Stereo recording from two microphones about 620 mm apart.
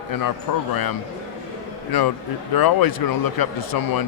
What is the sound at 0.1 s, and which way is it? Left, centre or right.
A man's voice, left.